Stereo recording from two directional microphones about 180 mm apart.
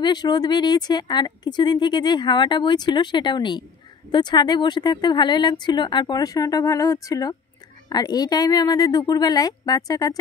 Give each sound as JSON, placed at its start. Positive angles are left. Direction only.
{"t": 0.0, "sound": "speech", "side_deg": 25}